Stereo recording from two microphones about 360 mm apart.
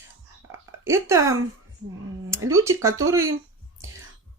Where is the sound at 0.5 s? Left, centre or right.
Centre.